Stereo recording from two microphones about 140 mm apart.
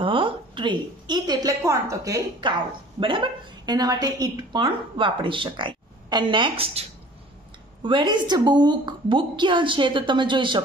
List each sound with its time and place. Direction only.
0.0 s a woman's voice: 35° right (ahead or behind)
7.8 s a woman's voice: 35° right (ahead or behind)